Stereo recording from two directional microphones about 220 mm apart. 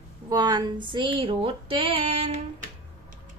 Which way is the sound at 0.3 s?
20° right (ahead or behind).